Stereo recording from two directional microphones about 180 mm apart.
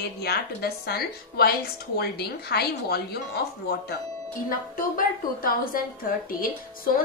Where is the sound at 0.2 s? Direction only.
60° left (ahead or behind).